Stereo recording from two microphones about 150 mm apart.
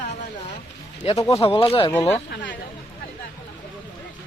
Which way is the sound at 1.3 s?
40° left (ahead or behind).